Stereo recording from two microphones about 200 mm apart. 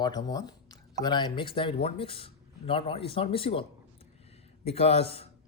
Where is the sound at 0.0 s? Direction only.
20° left (ahead or behind).